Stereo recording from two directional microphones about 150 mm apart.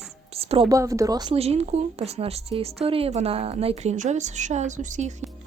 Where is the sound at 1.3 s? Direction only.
45° right (ahead or behind).